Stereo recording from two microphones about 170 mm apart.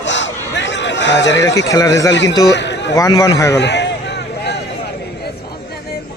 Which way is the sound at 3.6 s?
90° left.